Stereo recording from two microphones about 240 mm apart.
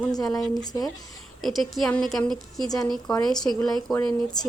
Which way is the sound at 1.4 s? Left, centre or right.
Centre.